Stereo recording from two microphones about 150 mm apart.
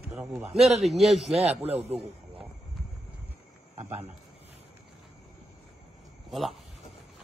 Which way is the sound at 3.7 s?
45° right (ahead or behind).